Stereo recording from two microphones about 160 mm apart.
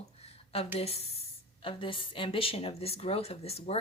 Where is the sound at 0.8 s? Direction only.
40° left (ahead or behind).